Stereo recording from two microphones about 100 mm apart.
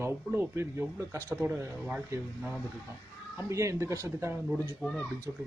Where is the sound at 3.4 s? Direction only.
30° right (ahead or behind).